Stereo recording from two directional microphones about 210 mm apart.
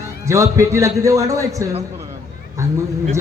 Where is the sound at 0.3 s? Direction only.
15° right (ahead or behind).